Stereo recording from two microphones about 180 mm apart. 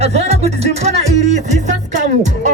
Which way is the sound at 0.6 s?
35° right (ahead or behind).